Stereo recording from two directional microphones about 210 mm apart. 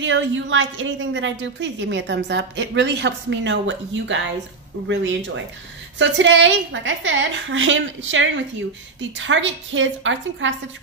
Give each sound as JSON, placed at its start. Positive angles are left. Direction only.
{"t": 0.0, "sound": "a woman's voice", "side_deg": -60}